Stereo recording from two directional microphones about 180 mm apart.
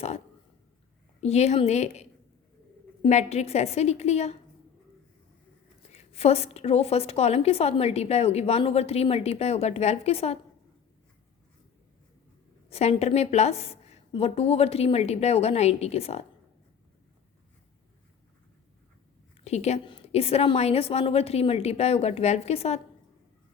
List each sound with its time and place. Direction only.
1.2 s a woman's voice: 35° left (ahead or behind)
5.9 s a woman's voice: 35° left (ahead or behind)
12.7 s a woman's voice: 35° left (ahead or behind)
19.5 s a woman's voice: 35° left (ahead or behind)